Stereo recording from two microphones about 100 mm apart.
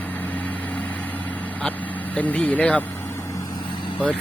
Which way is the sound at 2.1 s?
15° left (ahead or behind).